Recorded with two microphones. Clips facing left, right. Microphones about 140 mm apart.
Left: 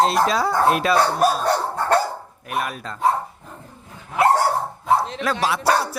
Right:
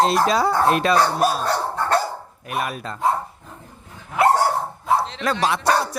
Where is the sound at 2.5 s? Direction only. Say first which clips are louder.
Even; centre (ahead or behind).